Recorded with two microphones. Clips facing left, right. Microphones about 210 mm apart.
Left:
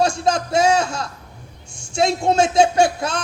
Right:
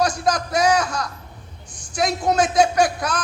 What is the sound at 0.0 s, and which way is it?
Speech, 25° left (ahead or behind).